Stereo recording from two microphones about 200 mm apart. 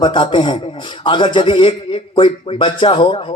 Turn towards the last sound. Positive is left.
turn(degrees=25)  # may be behind; listen again after turning